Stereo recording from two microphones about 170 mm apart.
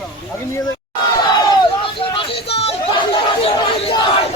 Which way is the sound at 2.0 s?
30° left (ahead or behind).